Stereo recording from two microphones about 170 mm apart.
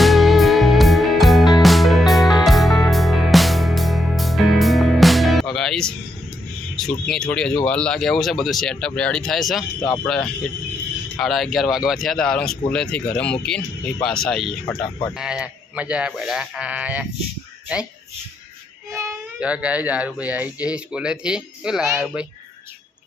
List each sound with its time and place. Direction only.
0.0 s music: centre (ahead or behind)
6.7 s speech: centre (ahead or behind)
18.9 s speech: 15° right (ahead or behind)
19.4 s speech: 5° right (ahead or behind)